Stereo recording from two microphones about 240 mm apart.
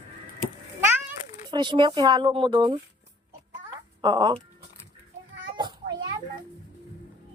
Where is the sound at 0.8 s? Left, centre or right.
Centre.